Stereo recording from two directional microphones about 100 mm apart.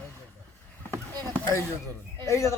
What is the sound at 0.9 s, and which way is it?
Rowboat, 30° right (ahead or behind).